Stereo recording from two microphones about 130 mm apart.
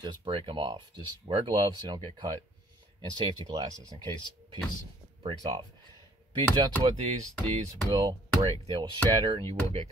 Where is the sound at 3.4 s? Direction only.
40° right (ahead or behind).